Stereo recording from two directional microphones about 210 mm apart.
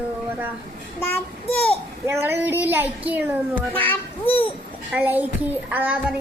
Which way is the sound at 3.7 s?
10° left (ahead or behind).